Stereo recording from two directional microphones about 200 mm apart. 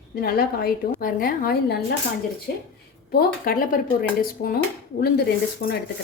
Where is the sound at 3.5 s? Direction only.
45° left (ahead or behind).